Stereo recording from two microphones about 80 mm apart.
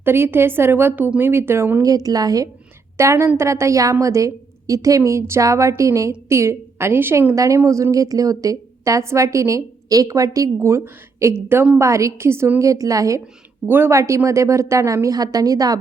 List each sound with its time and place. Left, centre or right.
0.0 s a woman's voice: right
1.8 s a woman's voice: right
3.0 s a woman's voice: right
7.3 s a woman's voice: right
13.7 s a woman's voice: right
14.3 s a woman's voice: right